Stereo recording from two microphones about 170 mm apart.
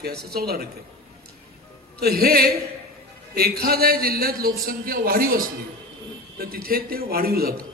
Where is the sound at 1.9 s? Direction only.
65° right (ahead or behind).